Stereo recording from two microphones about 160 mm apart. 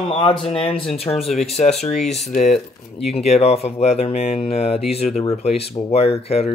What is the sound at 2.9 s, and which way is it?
Speech, 40° left (ahead or behind).